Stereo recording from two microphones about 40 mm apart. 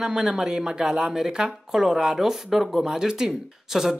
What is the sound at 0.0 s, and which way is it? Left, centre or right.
Speech, centre.